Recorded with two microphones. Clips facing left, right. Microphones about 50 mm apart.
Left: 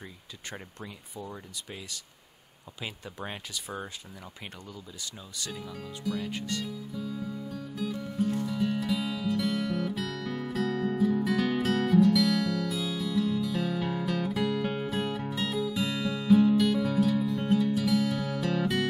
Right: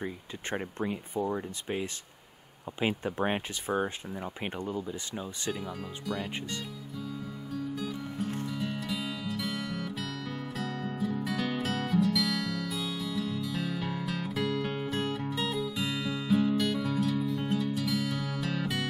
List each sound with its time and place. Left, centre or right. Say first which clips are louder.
0.0 s speech: right 7 dB; right
8.5 s music: left 5 dB; centre